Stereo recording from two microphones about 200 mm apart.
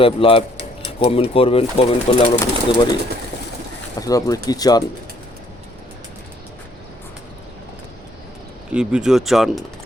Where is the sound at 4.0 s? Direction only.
15° left (ahead or behind).